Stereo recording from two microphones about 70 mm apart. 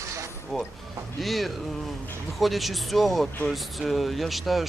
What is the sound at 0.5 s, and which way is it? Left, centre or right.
Speech, centre.